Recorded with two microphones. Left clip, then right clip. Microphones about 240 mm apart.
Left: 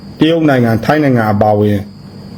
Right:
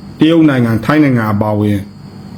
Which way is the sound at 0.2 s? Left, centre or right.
Centre.